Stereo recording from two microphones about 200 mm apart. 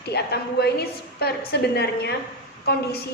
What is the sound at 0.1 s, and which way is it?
A woman's voice, 55° left (ahead or behind).